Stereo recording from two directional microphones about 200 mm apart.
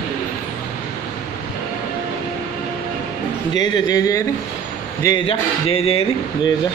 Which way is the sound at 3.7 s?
20° left (ahead or behind).